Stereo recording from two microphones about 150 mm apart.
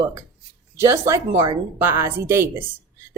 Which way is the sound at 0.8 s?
20° right (ahead or behind).